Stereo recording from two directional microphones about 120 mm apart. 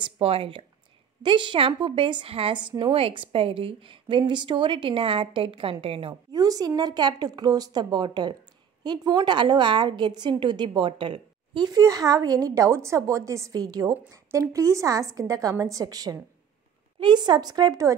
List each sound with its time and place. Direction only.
0.0 s a woman's voice: 50° right (ahead or behind)
6.3 s a woman's voice: 30° right (ahead or behind)